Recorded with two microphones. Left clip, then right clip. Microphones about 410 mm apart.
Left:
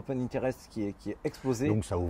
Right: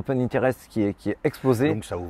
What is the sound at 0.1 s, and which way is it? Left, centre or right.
Speech, right.